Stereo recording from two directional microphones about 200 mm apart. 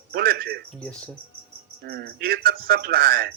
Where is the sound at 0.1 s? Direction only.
50° right (ahead or behind).